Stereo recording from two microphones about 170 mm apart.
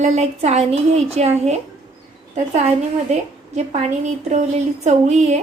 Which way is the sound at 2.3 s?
40° right (ahead or behind).